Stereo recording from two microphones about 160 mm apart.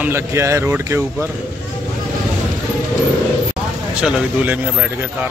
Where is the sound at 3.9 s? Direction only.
10° right (ahead or behind).